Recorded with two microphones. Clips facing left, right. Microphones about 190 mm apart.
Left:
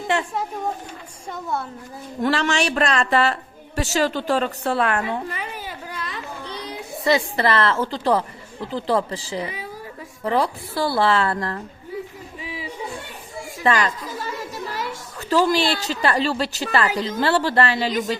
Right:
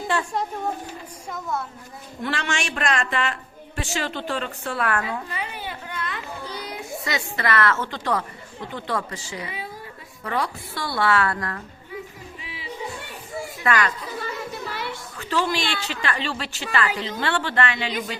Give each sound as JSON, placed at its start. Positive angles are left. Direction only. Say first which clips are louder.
{"t": 0.1, "sound": "a woman's voice", "louder": "left 2 dB", "side_deg": 20}
{"t": 1.3, "sound": "a woman's voice", "louder": "left 2 dB", "side_deg": 30}
{"t": 5.3, "sound": "a sound", "louder": "even", "side_deg": 45}
{"t": 6.5, "sound": "a woman's voice", "louder": "even", "side_deg": 30}
{"t": 13.6, "sound": "a woman's voice", "louder": "left 3 dB", "side_deg": 30}
{"t": 14.7, "sound": "a woman's voice", "louder": "left 2 dB", "side_deg": 40}